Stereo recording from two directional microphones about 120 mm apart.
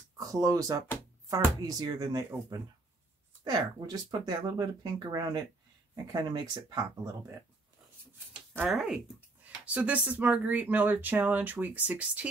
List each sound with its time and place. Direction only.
0.2 s speech: 30° right (ahead or behind)
8.3 s speech: 10° right (ahead or behind)